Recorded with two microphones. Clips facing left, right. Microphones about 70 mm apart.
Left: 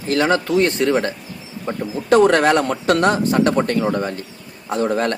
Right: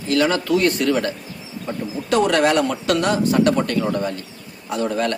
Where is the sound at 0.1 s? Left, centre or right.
Left.